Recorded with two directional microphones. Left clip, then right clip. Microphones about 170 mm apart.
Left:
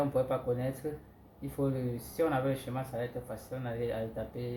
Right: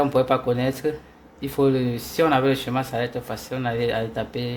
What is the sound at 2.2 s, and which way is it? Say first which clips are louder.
Speech: right 12 dB; 75° right (ahead or behind).